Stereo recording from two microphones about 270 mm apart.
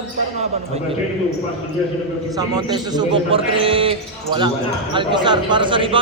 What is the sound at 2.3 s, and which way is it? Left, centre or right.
A man's voice, centre.